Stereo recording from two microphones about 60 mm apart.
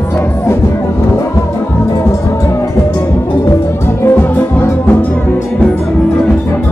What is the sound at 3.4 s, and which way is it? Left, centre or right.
Music, left.